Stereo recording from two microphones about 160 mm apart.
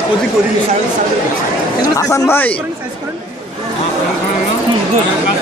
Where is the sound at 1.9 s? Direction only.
20° left (ahead or behind).